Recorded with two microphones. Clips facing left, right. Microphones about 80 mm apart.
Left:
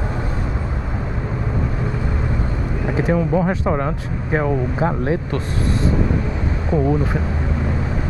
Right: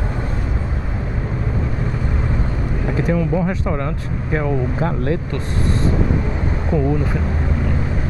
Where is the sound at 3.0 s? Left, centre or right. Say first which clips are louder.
Left 1 dB; left.